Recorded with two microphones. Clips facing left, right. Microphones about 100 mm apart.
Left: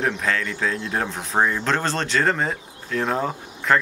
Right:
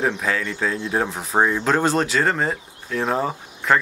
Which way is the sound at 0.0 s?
5° right (ahead or behind).